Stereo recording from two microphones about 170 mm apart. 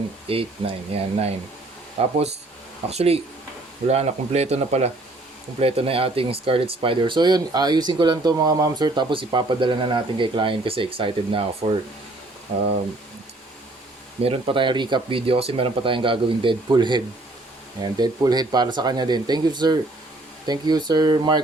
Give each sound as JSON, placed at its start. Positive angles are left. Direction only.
{"t": 0.3, "sound": "speech", "side_deg": -35}
{"t": 14.3, "sound": "speech", "side_deg": -30}